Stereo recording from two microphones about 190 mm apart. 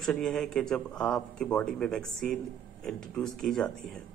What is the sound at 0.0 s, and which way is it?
Speech, centre (ahead or behind).